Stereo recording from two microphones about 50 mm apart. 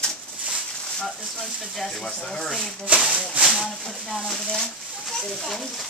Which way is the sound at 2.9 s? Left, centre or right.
Centre.